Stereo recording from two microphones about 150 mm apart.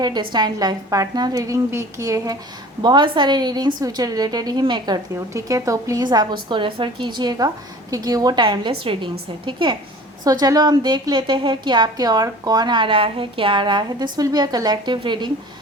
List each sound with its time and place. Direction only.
0.0 s a woman's voice: 30° right (ahead or behind)